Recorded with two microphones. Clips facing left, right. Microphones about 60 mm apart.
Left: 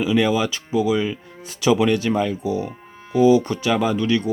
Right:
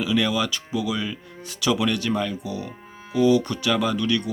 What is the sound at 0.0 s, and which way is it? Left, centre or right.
Speech, left.